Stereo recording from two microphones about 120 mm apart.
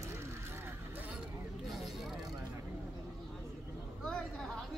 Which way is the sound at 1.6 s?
Centre (ahead or behind).